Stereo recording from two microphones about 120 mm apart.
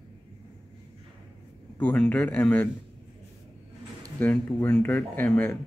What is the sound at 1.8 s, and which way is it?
Speech, 15° left (ahead or behind).